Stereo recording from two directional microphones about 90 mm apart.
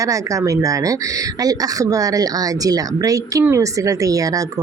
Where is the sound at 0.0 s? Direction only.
35° right (ahead or behind).